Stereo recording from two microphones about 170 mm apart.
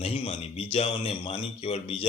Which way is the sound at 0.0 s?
35° left (ahead or behind).